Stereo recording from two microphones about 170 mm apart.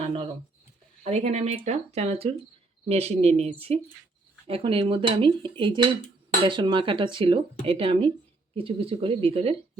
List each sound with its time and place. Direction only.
0.0 s speech: 35° right (ahead or behind)